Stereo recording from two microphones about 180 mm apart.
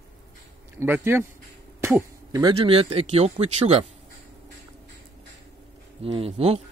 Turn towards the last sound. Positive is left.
turn(degrees=-35)  # may be behind; listen again after turning